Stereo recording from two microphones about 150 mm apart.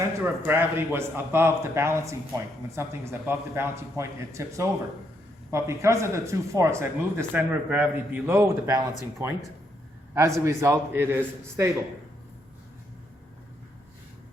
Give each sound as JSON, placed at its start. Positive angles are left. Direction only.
{"t": 0.2, "sound": "a man's voice", "side_deg": -15}